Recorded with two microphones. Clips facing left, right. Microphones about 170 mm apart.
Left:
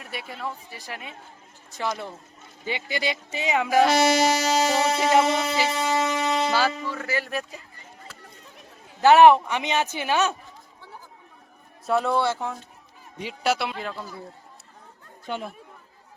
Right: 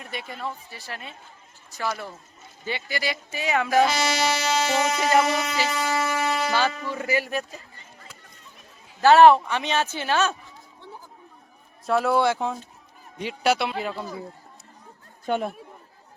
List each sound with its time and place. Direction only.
0.0 s speech: 5° left (ahead or behind)
3.8 s music: 55° left (ahead or behind); by 4.9 s 35° left (ahead or behind)
4.9 s speech: 15° left (ahead or behind)
5.2 s speech: 25° left (ahead or behind)
5.5 s shofar: 20° left (ahead or behind)
6.5 s music: 5° left (ahead or behind)
6.8 s speech: 15° right (ahead or behind)
9.0 s a man's voice: 15° left (ahead or behind)
11.9 s speech: 5° right (ahead or behind)
12.2 s speech: 15° right (ahead or behind)
13.2 s speech: centre (ahead or behind)
13.7 s speech: 10° right (ahead or behind)
15.3 s speech: 55° right (ahead or behind)